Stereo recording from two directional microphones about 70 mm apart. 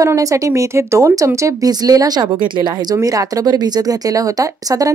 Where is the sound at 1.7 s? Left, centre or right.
Right.